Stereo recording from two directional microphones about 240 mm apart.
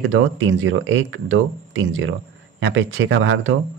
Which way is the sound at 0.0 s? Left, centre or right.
Right.